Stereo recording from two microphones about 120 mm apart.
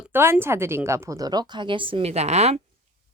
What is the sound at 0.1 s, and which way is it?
A woman's voice, 20° right (ahead or behind).